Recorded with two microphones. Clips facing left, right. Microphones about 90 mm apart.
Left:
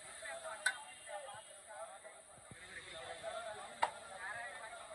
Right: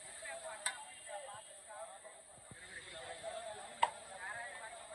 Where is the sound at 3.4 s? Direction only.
25° left (ahead or behind).